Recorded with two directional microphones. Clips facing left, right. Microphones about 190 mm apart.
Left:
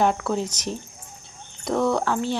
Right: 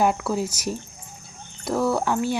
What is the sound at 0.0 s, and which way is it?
Speech, 5° right (ahead or behind).